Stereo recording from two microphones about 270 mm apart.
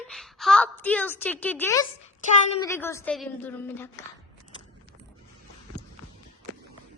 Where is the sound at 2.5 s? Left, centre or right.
Centre.